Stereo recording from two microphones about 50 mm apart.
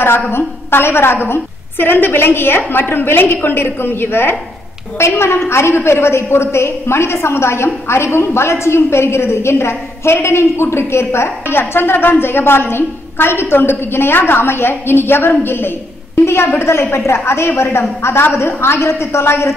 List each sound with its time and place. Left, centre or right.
0.4 s a woman's voice: left
4.9 s a woman's voice: left